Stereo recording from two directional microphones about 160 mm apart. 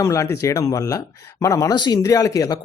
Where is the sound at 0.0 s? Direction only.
20° left (ahead or behind).